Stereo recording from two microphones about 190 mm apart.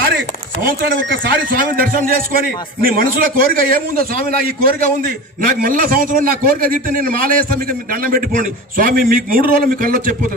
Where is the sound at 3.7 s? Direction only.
50° right (ahead or behind).